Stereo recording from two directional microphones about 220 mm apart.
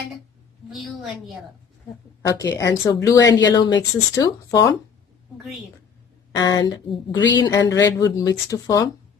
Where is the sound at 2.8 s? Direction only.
15° left (ahead or behind).